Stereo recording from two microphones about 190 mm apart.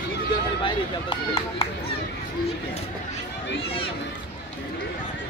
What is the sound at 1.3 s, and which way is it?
Speech, 30° left (ahead or behind).